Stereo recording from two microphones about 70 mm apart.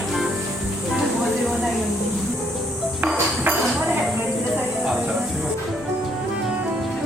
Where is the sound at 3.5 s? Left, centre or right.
Right.